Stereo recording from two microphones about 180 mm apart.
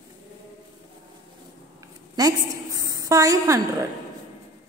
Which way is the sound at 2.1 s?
20° right (ahead or behind).